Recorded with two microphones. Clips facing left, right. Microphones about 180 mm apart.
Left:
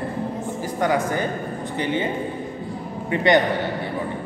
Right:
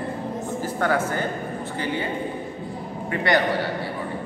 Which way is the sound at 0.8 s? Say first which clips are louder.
Left 2 dB; 15° left (ahead or behind).